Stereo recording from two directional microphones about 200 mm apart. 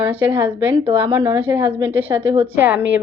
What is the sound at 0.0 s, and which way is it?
Speech, 10° right (ahead or behind).